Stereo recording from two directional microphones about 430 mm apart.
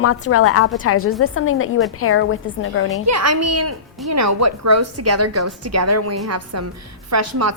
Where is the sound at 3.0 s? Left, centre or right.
Right.